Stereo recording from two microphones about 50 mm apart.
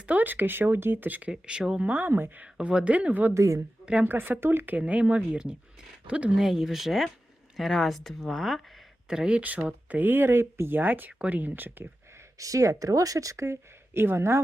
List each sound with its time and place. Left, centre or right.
0.0 s speech: right
1.3 s speech: centre
1.9 s speech: right
2.4 s a woman's voice: right
3.3 s a woman's voice: right
4.0 s a woman's voice: right
6.3 s speech: centre
9.0 s speech: centre
9.4 s speech: right
12.4 s a woman's voice: right
13.9 s speech: right